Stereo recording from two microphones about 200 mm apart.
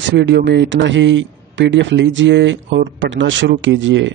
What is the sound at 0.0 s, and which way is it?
Speech, 60° right (ahead or behind).